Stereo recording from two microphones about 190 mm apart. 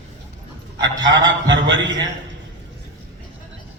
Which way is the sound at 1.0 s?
75° right (ahead or behind).